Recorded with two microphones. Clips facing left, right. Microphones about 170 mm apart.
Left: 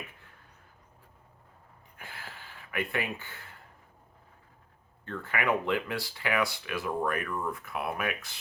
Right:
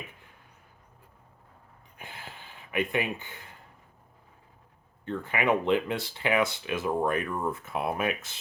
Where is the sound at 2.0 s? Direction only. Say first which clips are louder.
Right 2 dB; 20° right (ahead or behind).